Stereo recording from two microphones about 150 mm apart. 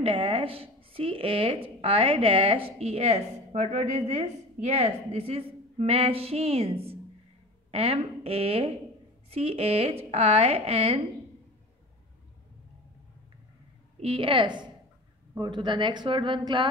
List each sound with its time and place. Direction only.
0.0 s a woman's voice: 35° right (ahead or behind)
13.9 s a woman's voice: 40° right (ahead or behind)